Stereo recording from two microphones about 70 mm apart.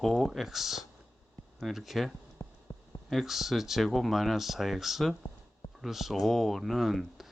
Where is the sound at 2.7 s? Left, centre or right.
Left.